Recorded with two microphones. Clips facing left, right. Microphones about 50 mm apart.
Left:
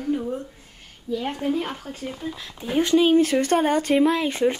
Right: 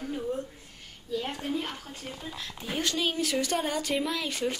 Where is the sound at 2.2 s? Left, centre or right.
Centre.